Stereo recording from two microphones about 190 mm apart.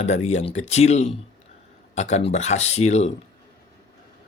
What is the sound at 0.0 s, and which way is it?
Speech, 35° left (ahead or behind).